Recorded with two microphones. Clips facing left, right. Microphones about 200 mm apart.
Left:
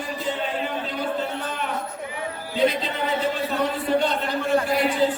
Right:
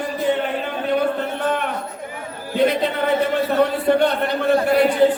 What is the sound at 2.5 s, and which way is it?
A man's voice, 60° right (ahead or behind).